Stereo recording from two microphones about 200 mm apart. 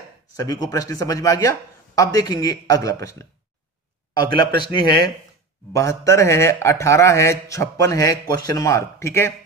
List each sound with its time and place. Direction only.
0.4 s speech: 15° left (ahead or behind)
4.6 s speech: 20° left (ahead or behind)